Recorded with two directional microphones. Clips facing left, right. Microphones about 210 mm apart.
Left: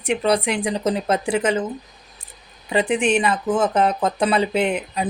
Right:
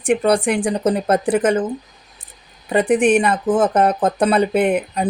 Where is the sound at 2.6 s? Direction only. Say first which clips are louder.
Right 5 dB; 55° right (ahead or behind).